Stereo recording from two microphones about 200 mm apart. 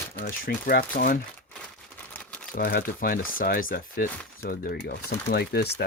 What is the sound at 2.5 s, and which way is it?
Speech, 45° left (ahead or behind).